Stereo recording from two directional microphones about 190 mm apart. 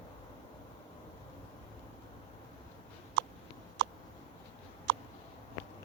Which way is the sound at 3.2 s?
75° right (ahead or behind).